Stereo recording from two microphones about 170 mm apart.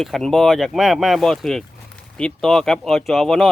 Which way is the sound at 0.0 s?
Centre (ahead or behind).